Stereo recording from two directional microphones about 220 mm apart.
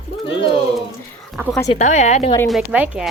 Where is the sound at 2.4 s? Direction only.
5° right (ahead or behind).